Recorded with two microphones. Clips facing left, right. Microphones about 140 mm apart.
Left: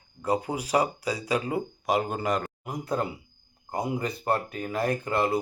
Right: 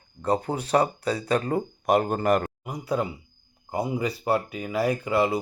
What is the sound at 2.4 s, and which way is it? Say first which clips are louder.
A man's voice: right 1 dB; centre (ahead or behind).